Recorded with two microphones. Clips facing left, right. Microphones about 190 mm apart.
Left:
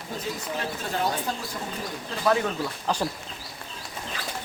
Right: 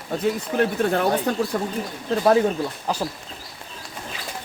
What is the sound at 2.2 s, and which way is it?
Speech, 35° right (ahead or behind).